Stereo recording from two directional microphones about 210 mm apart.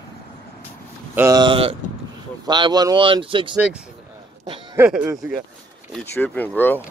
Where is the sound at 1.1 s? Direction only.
15° right (ahead or behind).